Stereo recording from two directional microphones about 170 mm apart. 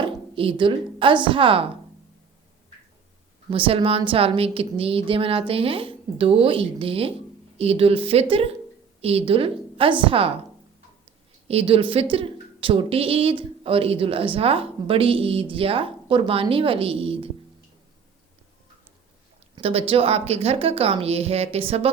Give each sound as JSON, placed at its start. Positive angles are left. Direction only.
{"t": 0.0, "sound": "a woman's voice", "side_deg": -30}
{"t": 3.5, "sound": "a woman's voice", "side_deg": -30}
{"t": 11.4, "sound": "a woman's voice", "side_deg": -35}
{"t": 19.5, "sound": "a woman's voice", "side_deg": -35}